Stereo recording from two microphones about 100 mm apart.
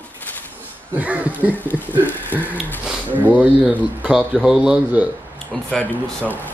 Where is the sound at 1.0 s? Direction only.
15° right (ahead or behind).